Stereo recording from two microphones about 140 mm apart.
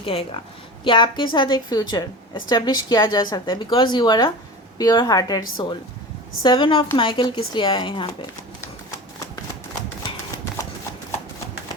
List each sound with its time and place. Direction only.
0.0 s a woman's voice: 40° left (ahead or behind)
10.0 s horse: 25° left (ahead or behind)